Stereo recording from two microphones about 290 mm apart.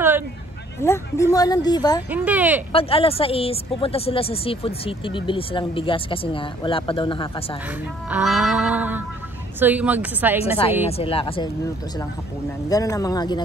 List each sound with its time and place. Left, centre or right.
0.7 s speech: centre
2.0 s music: centre
2.7 s a woman's voice: centre
8.1 s music: centre
9.6 s a woman's voice: centre
10.9 s a woman's voice: centre
12.6 s speech: centre